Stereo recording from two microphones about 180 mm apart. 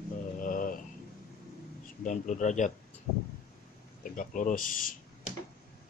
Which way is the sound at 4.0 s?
45° left (ahead or behind).